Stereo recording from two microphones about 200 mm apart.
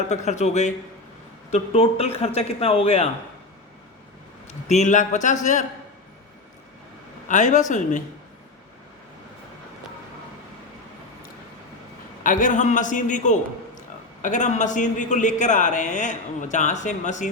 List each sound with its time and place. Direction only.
0.3 s a man's voice: 35° left (ahead or behind)
4.7 s a man's voice: 35° left (ahead or behind)
7.3 s a man's voice: 40° left (ahead or behind)
12.2 s a man's voice: 40° left (ahead or behind)